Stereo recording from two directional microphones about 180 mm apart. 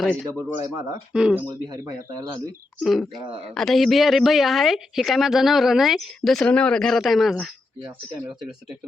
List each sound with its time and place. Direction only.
0.0 s a man's voice: 10° left (ahead or behind)
0.6 s speech: 20° right (ahead or behind)
1.1 s a woman's voice: 5° right (ahead or behind)
2.8 s a woman's voice: centre (ahead or behind)